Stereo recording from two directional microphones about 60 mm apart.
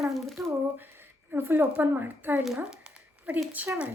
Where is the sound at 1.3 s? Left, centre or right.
Right.